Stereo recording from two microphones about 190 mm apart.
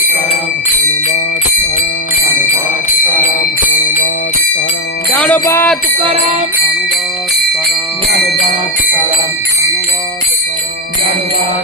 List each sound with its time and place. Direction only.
5.1 s jingle bell: 5° left (ahead or behind)
6.0 s jingle bell: 30° right (ahead or behind)